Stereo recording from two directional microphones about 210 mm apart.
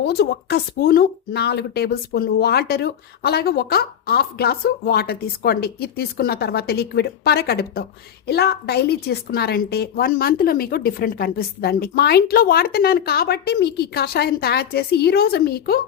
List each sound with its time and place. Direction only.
0.0 s a woman's voice: 50° left (ahead or behind)